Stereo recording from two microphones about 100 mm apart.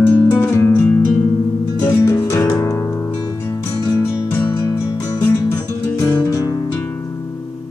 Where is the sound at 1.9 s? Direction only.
25° left (ahead or behind).